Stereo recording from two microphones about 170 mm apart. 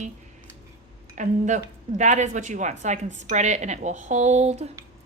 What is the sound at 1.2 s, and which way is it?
A woman's voice, 45° right (ahead or behind).